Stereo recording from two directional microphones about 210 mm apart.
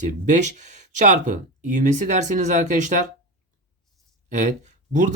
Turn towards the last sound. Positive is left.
turn(degrees=-35)  # may be behind; listen again after turning